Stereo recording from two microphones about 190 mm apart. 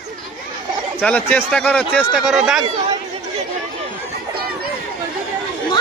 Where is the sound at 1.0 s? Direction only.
10° left (ahead or behind).